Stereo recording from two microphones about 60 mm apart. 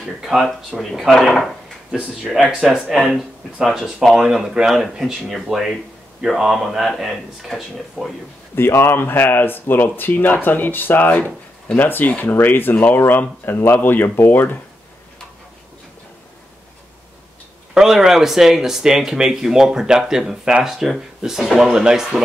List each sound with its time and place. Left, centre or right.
0.2 s speech: centre
2.3 s speech: centre
8.5 s speech: left
17.7 s speech: centre